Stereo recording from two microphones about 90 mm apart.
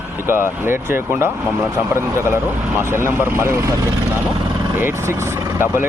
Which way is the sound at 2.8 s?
25° right (ahead or behind).